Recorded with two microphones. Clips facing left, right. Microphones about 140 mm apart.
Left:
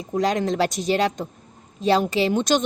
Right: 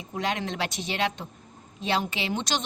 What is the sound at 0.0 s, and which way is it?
A woman's voice, 40° left (ahead or behind).